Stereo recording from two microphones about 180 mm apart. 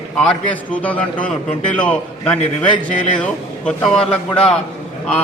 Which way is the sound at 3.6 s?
5° left (ahead or behind).